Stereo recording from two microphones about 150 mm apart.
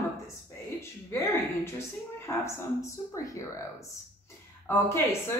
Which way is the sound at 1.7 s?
20° left (ahead or behind).